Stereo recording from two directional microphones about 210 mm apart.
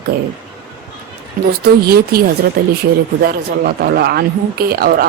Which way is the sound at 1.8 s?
45° right (ahead or behind).